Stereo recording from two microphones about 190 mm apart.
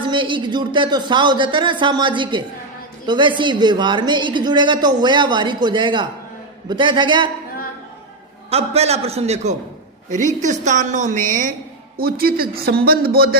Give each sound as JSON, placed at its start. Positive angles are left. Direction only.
{"t": 0.0, "sound": "speech", "side_deg": -25}
{"t": 8.4, "sound": "a woman's voice", "side_deg": -35}